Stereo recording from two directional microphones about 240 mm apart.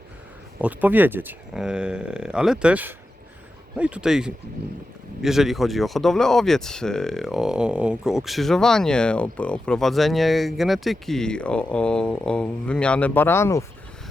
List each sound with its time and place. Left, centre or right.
0.6 s speech: centre